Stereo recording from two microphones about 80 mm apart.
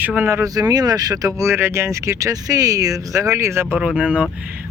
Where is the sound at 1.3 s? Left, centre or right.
Right.